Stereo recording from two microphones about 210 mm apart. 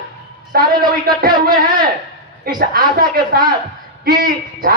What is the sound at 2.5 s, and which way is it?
A man's voice, 45° right (ahead or behind).